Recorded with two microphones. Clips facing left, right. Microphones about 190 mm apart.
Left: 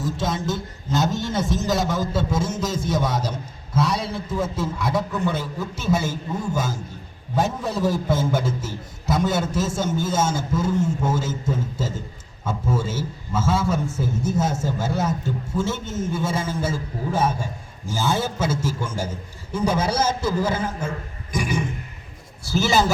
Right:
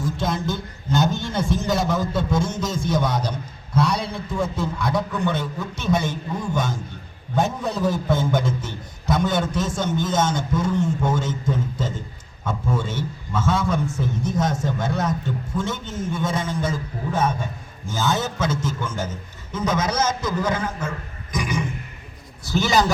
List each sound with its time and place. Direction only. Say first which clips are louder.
0.0 s a man's voice: even; centre (ahead or behind)
19.7 s a man's voice: right 2 dB; 30° left (ahead or behind)
21.3 s a sound: left 1 dB; 30° left (ahead or behind)
22.5 s a man's voice: even; 5° left (ahead or behind)